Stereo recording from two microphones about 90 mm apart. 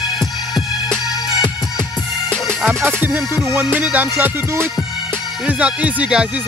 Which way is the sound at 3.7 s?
20° right (ahead or behind).